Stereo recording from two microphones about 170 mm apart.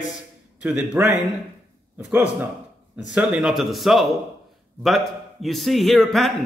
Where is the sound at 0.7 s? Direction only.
15° right (ahead or behind).